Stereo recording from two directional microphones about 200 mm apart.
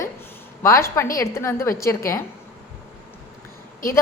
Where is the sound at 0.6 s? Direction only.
15° left (ahead or behind).